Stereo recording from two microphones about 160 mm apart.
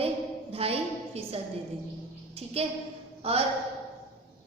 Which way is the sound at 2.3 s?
40° right (ahead or behind).